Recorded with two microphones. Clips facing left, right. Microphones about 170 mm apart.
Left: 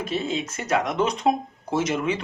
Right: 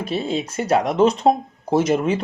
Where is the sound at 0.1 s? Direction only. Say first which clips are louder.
Right 5 dB; 35° right (ahead or behind).